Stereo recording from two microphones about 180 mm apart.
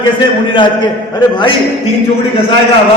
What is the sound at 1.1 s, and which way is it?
Speech, 25° left (ahead or behind).